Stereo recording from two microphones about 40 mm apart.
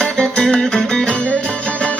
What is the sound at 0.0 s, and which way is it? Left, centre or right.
Music, left.